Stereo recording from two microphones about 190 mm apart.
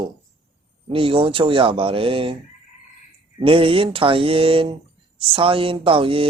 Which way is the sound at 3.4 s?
30° right (ahead or behind).